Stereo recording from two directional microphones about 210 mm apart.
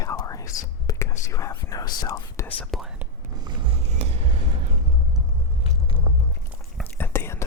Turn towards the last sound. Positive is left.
turn(degrees=10)  # may be behind; listen again after turning